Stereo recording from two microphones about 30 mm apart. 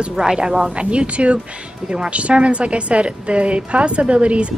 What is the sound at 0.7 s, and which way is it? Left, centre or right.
Speech, right.